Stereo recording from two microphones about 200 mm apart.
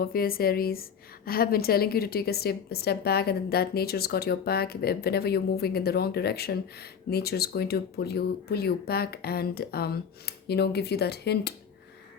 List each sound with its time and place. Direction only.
0.0 s a woman's voice: 45° left (ahead or behind)